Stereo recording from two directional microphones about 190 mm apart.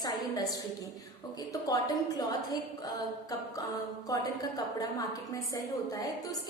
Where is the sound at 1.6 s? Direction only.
20° left (ahead or behind).